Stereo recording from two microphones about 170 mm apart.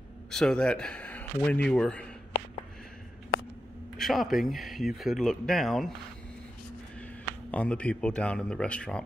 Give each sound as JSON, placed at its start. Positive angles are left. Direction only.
{"t": 0.3, "sound": "speech", "side_deg": 5}
{"t": 4.0, "sound": "speech", "side_deg": 0}
{"t": 7.5, "sound": "speech", "side_deg": 5}